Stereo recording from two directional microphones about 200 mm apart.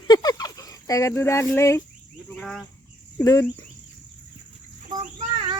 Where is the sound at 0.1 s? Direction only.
20° left (ahead or behind).